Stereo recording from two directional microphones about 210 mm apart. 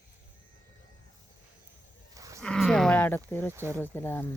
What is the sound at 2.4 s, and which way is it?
Wild animals, 5° left (ahead or behind).